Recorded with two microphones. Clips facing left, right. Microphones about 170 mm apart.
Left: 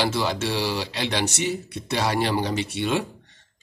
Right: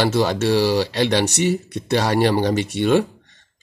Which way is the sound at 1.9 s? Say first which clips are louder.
Right 6 dB; 55° right (ahead or behind).